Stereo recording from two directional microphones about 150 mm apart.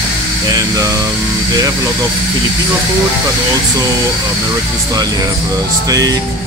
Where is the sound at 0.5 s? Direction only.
25° right (ahead or behind).